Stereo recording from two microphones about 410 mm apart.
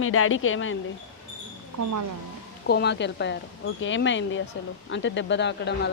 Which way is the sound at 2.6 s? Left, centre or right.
Left.